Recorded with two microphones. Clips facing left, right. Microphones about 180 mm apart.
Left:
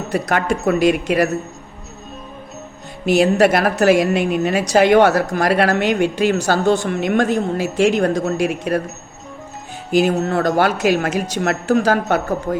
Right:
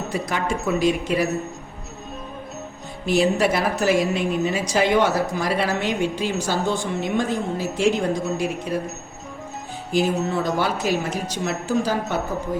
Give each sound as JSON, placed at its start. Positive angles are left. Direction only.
{"t": 0.1, "sound": "speech", "side_deg": 65}
{"t": 3.1, "sound": "speech", "side_deg": 75}
{"t": 9.9, "sound": "speech", "side_deg": 70}
{"t": 10.6, "sound": "speech", "side_deg": 75}